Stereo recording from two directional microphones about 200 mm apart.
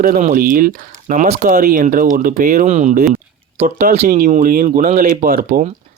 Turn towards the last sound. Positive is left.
turn(degrees=-50)  # may be behind; listen again after turning